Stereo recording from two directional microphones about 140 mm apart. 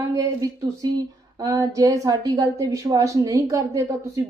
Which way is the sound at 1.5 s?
25° right (ahead or behind).